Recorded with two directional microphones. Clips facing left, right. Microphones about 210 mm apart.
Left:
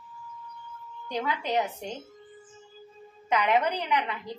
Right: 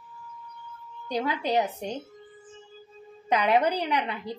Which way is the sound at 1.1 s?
35° right (ahead or behind).